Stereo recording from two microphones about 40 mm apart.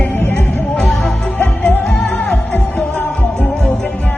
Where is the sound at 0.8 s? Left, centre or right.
Centre.